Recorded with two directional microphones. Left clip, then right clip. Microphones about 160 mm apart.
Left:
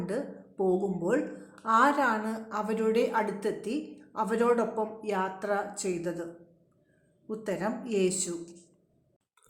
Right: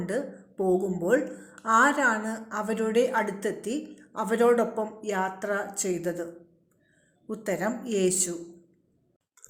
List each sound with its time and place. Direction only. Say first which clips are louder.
0.0 s a woman's voice: right 3 dB; 15° right (ahead or behind)
7.3 s a woman's voice: right 3 dB; 20° right (ahead or behind)